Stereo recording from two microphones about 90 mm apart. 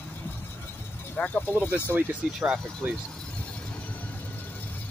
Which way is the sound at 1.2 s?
20° left (ahead or behind).